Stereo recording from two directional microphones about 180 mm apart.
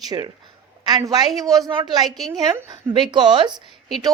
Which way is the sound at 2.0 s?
Centre (ahead or behind).